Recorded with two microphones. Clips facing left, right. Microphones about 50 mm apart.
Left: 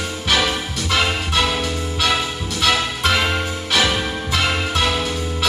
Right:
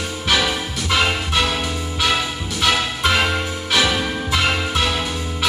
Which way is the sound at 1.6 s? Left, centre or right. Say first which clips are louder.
Left 1 dB; centre.